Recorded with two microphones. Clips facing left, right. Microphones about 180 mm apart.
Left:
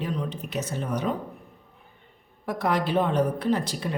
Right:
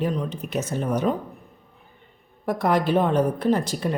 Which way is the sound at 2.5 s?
50° right (ahead or behind).